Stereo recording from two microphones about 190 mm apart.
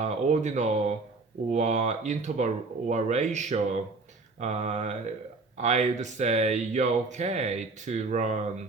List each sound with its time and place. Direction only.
0.0 s speech: 40° right (ahead or behind)